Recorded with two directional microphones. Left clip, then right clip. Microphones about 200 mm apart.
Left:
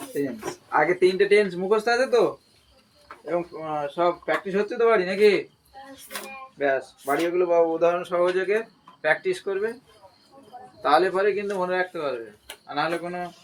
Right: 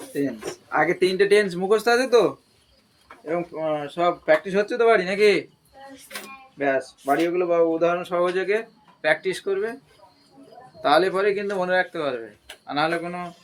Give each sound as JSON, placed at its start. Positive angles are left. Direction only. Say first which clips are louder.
{"t": 0.7, "sound": "speech", "louder": "left 1 dB", "side_deg": -30}
{"t": 3.2, "sound": "speech", "louder": "right 3 dB", "side_deg": -55}
{"t": 6.6, "sound": "speech", "louder": "right 1 dB", "side_deg": -40}
{"t": 10.8, "sound": "speech", "louder": "right 1 dB", "side_deg": -30}